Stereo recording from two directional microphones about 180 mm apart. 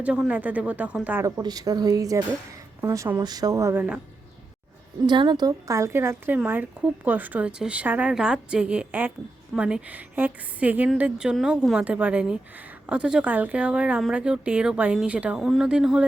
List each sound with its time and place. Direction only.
0.0 s a woman's voice: 5° right (ahead or behind)
1.4 s a woman's voice: 20° right (ahead or behind)
5.0 s a woman's voice: 25° right (ahead or behind); by 16.0 s 5° right (ahead or behind)